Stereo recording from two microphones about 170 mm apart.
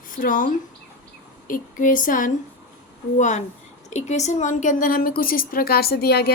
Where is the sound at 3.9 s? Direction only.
40° left (ahead or behind).